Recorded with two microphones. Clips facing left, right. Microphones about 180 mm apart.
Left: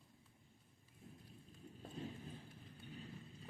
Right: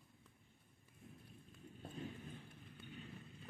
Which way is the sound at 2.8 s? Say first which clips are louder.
Left 1 dB; 35° left (ahead or behind).